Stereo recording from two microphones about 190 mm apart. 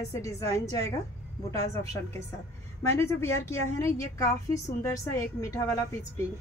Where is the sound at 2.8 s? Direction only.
15° left (ahead or behind).